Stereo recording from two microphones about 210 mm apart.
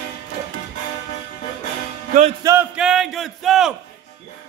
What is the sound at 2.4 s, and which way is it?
Music, 15° right (ahead or behind).